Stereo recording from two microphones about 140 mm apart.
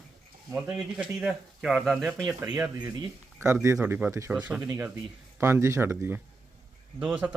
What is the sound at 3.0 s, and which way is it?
Speech, 20° right (ahead or behind).